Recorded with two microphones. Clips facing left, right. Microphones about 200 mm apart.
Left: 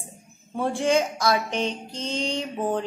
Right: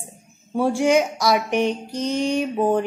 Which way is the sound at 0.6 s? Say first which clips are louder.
Right 4 dB; 15° right (ahead or behind).